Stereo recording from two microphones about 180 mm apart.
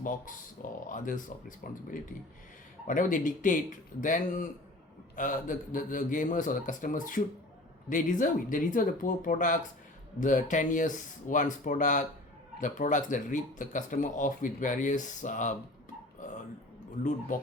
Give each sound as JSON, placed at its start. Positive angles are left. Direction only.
{"t": 0.0, "sound": "speech", "side_deg": 45}
{"t": 17.0, "sound": "speech", "side_deg": 45}